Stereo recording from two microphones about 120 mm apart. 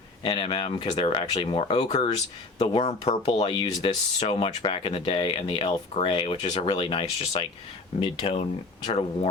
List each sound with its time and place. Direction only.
0.2 s speech: 45° left (ahead or behind)
3.4 s speech: 45° left (ahead or behind)